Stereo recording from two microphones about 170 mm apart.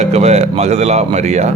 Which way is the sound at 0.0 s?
40° right (ahead or behind).